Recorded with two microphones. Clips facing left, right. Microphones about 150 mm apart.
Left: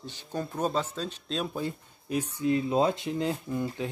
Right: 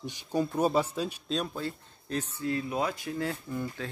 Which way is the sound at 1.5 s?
15° left (ahead or behind).